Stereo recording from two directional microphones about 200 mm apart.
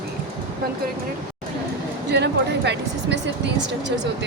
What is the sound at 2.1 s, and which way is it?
Speech, 60° right (ahead or behind).